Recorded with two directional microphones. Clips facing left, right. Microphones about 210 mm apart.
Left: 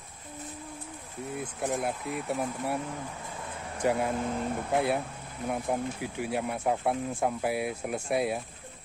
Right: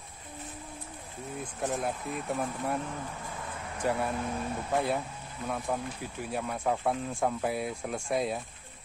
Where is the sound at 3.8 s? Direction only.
15° left (ahead or behind).